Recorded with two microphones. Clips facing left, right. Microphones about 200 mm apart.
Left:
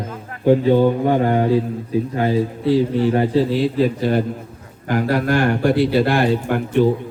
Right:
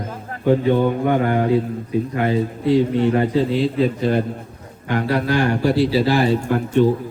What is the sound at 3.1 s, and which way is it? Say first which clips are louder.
Speech: left 1 dB; 30° left (ahead or behind).